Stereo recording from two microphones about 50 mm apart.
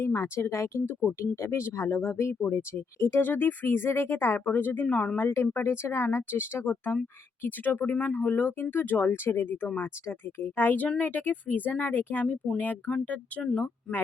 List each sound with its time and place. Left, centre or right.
0.0 s speech: left
0.9 s speech: left
1.4 s speech: left
2.3 s speech: left
2.6 s speech: left
4.4 s speech: left
4.9 s speech: left
5.3 s speech: left
10.8 s speech: left
13.4 s speech: centre